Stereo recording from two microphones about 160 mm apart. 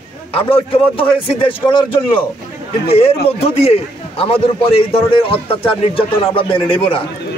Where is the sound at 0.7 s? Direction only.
35° left (ahead or behind).